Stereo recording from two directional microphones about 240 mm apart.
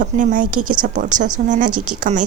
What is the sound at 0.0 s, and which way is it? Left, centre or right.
A woman's voice, right.